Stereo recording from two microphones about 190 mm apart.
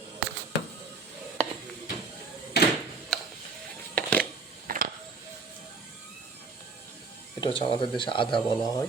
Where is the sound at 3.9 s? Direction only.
5° left (ahead or behind).